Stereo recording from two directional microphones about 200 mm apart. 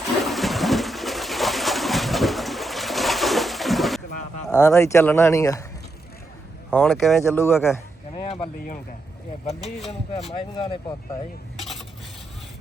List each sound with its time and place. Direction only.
0.2 s a sound: centre (ahead or behind)
4.5 s speech: 15° left (ahead or behind)
6.7 s speech: 5° left (ahead or behind)
8.1 s speech: 25° left (ahead or behind)
9.6 s speech: centre (ahead or behind)
10.2 s speech: 25° left (ahead or behind)
11.5 s dishes: centre (ahead or behind)